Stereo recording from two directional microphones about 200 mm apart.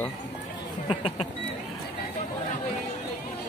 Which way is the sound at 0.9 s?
30° left (ahead or behind).